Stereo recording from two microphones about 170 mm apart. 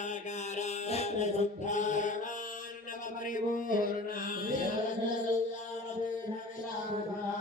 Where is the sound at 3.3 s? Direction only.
50° left (ahead or behind).